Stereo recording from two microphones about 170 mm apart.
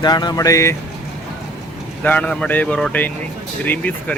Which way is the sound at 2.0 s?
10° left (ahead or behind).